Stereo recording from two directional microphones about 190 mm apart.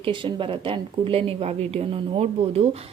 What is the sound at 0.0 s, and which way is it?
Speech, 25° right (ahead or behind).